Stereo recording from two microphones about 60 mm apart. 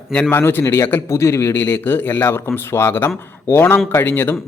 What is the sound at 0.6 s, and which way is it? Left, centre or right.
Speech, left.